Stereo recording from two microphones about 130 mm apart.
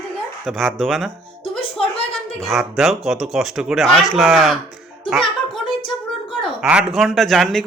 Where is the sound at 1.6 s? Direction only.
45° left (ahead or behind).